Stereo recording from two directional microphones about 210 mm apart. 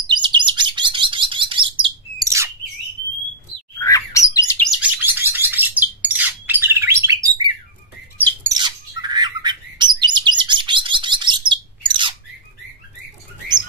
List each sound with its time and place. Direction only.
0.1 s chirp: 20° right (ahead or behind)
3.8 s bird: 15° left (ahead or behind)
4.6 s bird: 5° right (ahead or behind)
8.5 s bird: 20° right (ahead or behind)